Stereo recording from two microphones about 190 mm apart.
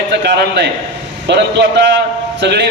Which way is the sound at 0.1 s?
65° right (ahead or behind).